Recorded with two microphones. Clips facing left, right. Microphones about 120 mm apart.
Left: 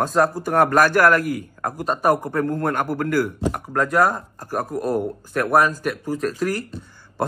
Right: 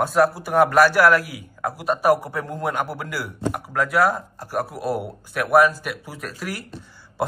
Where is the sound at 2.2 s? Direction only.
50° left (ahead or behind).